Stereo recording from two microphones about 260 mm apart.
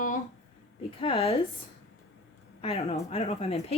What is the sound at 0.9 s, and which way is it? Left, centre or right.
Speech, left.